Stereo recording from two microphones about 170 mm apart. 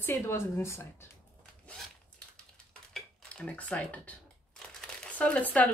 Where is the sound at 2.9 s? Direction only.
5° left (ahead or behind).